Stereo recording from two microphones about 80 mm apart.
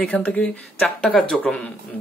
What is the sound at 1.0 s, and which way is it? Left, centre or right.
Speech, centre.